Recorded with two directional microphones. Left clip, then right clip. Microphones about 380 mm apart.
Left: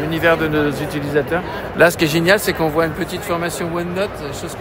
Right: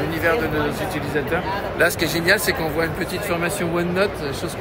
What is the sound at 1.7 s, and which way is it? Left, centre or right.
Speech, left.